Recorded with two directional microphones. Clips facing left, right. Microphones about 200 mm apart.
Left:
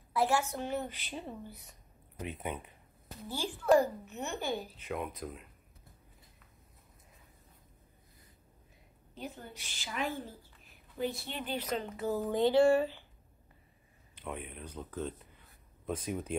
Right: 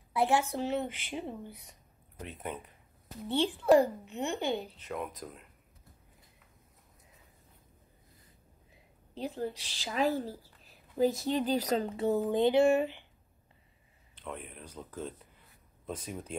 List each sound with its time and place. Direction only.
0.1 s a woman's voice: 20° right (ahead or behind)
2.1 s speech: 5° left (ahead or behind)
3.3 s a woman's voice: 20° right (ahead or behind)
4.8 s speech: 5° left (ahead or behind)
9.1 s a woman's voice: 30° right (ahead or behind)
12.2 s a woman's voice: 20° right (ahead or behind)
14.2 s speech: 5° left (ahead or behind)